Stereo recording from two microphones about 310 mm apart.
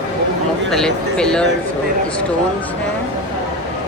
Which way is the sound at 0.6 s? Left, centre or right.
Centre.